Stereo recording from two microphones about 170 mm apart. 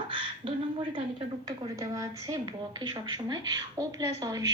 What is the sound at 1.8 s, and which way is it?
Speech, 20° right (ahead or behind).